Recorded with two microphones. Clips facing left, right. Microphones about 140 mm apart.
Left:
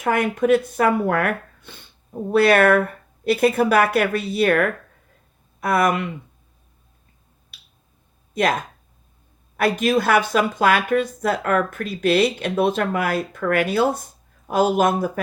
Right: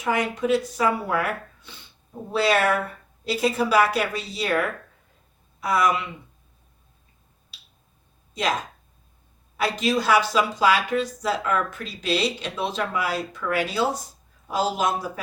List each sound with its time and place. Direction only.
0.0 s speech: 55° left (ahead or behind)
7.5 s finger snapping: 55° left (ahead or behind)
8.3 s a sound: 55° left (ahead or behind)
9.6 s speech: 55° left (ahead or behind)